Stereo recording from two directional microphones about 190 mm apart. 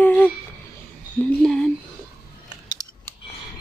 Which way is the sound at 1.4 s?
Centre (ahead or behind).